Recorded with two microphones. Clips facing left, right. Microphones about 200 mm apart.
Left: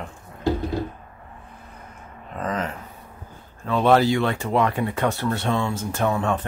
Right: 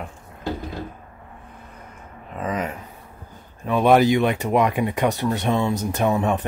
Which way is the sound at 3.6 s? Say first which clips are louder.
Right 2 dB; 15° right (ahead or behind).